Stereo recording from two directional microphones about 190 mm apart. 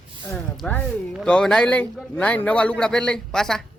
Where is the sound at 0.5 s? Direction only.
5° left (ahead or behind).